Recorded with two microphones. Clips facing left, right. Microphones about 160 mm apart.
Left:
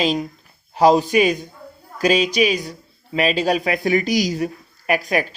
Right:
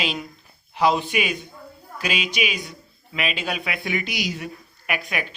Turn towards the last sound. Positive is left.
turn(degrees=40)  # may be behind; listen again after turning